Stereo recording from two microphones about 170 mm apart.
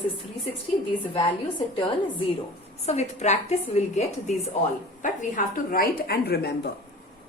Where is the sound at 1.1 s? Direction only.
30° left (ahead or behind).